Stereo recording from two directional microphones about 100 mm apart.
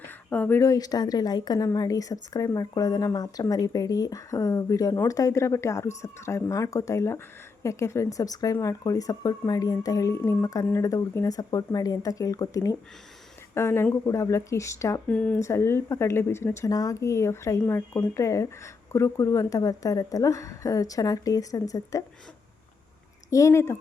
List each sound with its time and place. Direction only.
0.1 s a sound: 15° left (ahead or behind)
0.6 s speech: 35° left (ahead or behind)
15.0 s speech: 15° left (ahead or behind)
15.4 s speech: 30° left (ahead or behind)
16.6 s speech: 35° left (ahead or behind)
23.3 s speech: 30° left (ahead or behind)